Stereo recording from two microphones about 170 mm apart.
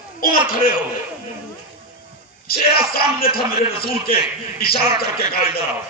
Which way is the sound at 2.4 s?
60° left (ahead or behind).